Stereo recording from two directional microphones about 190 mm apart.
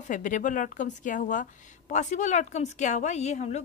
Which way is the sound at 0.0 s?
40° left (ahead or behind).